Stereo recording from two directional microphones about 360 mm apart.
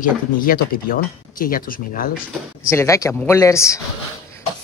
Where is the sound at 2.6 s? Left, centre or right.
Centre.